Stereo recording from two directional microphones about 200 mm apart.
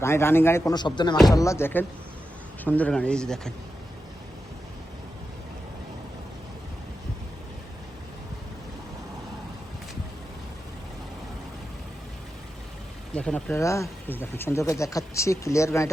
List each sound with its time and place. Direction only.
0.0 s speech: 10° left (ahead or behind)
13.1 s speech: 5° left (ahead or behind)